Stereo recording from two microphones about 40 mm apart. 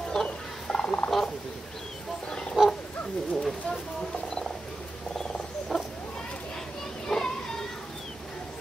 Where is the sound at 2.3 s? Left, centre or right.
Centre.